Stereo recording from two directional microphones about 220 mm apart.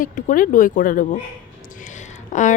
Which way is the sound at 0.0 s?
35° left (ahead or behind).